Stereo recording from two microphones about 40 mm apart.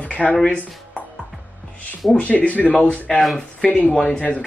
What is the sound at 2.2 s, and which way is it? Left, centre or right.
Speech, left.